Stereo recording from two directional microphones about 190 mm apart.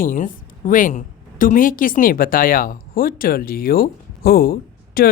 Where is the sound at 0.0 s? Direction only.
45° left (ahead or behind).